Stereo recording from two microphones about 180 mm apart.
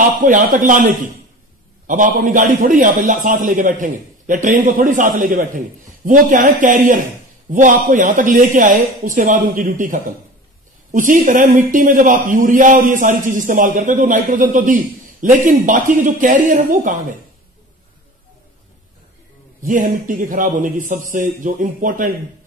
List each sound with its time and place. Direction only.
0.2 s a man's voice: 45° right (ahead or behind)
19.6 s a man's voice: 50° right (ahead or behind)